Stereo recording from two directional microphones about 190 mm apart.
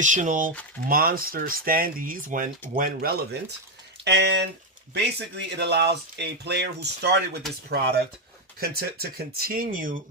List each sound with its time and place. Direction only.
0.0 s speech: 40° right (ahead or behind); by 7.2 s 60° right (ahead or behind)
8.5 s speech: 55° right (ahead or behind)